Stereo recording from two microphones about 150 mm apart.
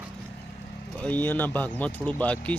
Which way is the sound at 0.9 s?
10° left (ahead or behind).